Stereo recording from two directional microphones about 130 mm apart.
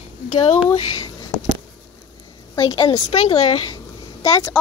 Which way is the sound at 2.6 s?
35° left (ahead or behind).